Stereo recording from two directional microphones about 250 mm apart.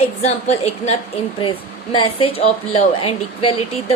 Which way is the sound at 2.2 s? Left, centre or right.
Left.